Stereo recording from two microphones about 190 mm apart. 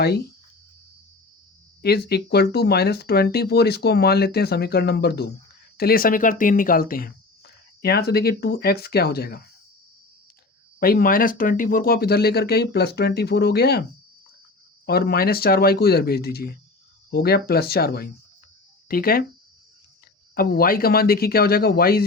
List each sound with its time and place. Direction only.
0.0 s speech: 55° left (ahead or behind)
1.8 s speech: 55° left (ahead or behind)
10.8 s speech: 50° left (ahead or behind)
14.8 s speech: 55° left (ahead or behind)
20.3 s speech: 50° left (ahead or behind)